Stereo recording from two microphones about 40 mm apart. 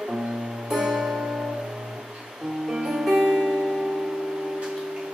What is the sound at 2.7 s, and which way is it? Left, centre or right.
Music, centre.